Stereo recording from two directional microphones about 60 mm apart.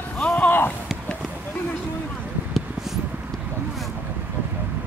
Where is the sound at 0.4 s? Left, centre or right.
Left.